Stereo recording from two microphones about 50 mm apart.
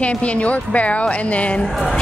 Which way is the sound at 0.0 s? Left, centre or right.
Left.